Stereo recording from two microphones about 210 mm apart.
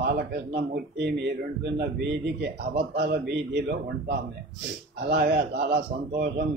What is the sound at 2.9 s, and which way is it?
A man's voice, 50° right (ahead or behind).